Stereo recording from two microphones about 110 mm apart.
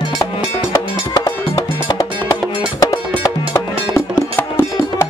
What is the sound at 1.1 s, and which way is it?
Music, 35° left (ahead or behind).